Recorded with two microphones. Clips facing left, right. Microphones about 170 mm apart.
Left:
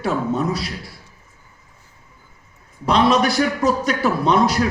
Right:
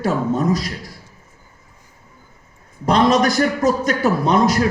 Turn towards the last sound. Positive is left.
turn(degrees=-45)  # may be behind; listen again after turning